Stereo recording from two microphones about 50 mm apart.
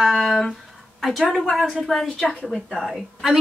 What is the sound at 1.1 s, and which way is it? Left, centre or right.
A woman's voice, centre.